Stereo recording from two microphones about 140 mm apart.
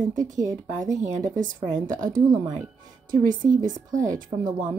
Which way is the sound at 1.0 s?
60° right (ahead or behind).